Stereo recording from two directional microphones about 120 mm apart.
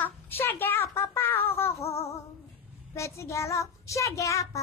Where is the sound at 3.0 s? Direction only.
25° left (ahead or behind).